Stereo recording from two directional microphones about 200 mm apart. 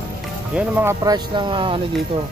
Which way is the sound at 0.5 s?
10° right (ahead or behind).